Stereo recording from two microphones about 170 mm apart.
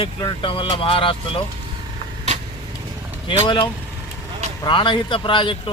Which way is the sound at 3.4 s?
25° left (ahead or behind).